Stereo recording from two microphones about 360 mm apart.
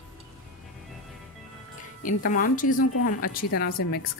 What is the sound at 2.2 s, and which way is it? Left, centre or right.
A woman's voice, left.